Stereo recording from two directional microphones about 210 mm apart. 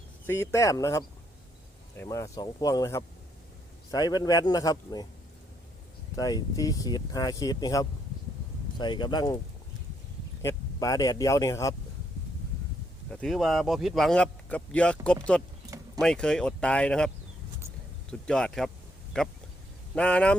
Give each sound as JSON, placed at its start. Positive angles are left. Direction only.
{"t": 0.3, "sound": "speech", "side_deg": 15}
{"t": 6.1, "sound": "speech", "side_deg": 15}
{"t": 10.4, "sound": "speech", "side_deg": 15}
{"t": 13.1, "sound": "speech", "side_deg": 5}
{"t": 18.1, "sound": "speech", "side_deg": 5}